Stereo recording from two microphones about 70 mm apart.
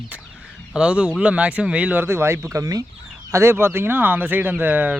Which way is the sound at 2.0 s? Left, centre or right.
Right.